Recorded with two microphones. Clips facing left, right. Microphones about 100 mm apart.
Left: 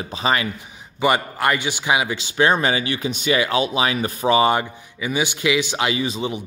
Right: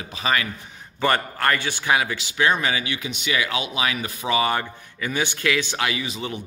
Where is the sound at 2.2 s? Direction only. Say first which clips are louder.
Left 4 dB; 30° left (ahead or behind).